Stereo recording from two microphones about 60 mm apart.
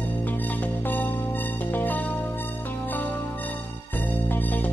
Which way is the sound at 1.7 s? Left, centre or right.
Left.